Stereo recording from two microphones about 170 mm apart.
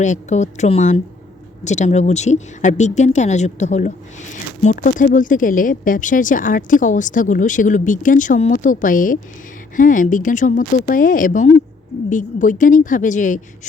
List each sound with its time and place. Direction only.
0.0 s speech: 45° left (ahead or behind)